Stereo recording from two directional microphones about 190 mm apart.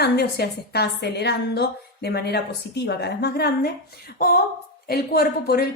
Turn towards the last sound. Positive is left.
turn(degrees=55)  # may be behind; listen again after turning